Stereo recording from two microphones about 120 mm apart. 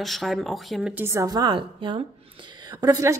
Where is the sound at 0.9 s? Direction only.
25° right (ahead or behind); by 2.0 s 45° right (ahead or behind).